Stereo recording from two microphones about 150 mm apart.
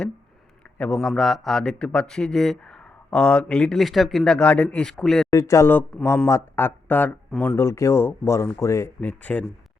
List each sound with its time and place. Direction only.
0.8 s a man's voice: 5° left (ahead or behind)
5.3 s speech: 20° left (ahead or behind)